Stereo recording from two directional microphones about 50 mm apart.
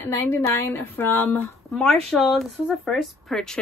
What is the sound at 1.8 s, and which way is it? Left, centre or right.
Speech, centre.